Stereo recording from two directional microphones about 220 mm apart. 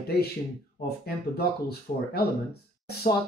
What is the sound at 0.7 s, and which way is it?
Speech, 45° left (ahead or behind).